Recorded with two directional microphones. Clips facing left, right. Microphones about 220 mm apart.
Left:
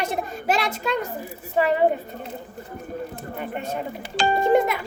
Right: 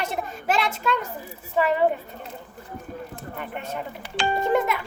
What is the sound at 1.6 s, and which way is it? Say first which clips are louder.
Speech: left 1 dB; 35° left (ahead or behind).